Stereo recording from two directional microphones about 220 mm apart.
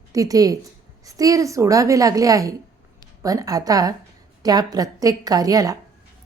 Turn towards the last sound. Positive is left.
turn(degrees=-15)  # may be behind; listen again after turning